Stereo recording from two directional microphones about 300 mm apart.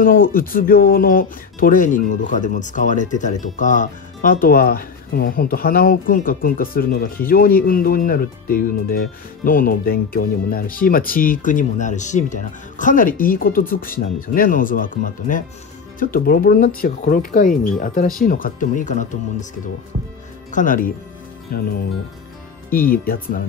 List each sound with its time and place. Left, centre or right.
0.0 s speech: left
20.5 s speech: left